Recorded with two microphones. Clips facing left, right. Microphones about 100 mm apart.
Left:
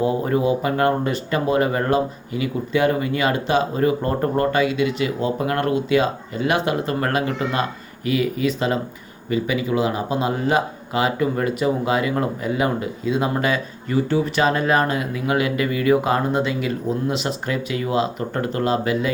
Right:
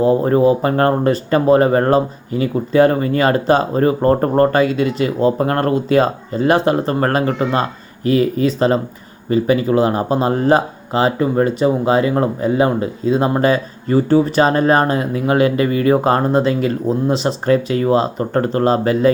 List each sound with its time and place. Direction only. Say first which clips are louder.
0.0 s speech: right 7 dB; 35° right (ahead or behind)